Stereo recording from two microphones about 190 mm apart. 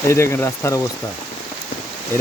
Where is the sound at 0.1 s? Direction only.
15° left (ahead or behind).